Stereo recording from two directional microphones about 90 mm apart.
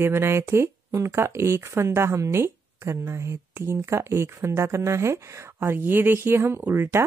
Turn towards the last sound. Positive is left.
turn(degrees=-25)  # may be behind; listen again after turning